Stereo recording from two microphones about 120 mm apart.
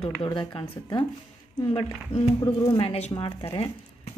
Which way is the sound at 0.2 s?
40° left (ahead or behind).